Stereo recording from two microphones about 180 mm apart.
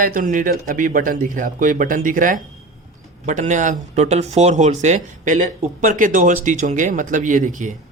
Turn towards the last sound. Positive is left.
turn(degrees=-45)  # may be behind; listen again after turning